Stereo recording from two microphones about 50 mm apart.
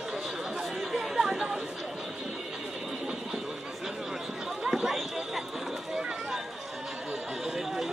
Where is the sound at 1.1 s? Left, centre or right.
Centre.